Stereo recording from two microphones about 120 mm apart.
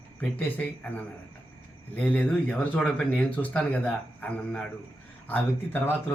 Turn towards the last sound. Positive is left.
turn(degrees=15)  # may be behind; listen again after turning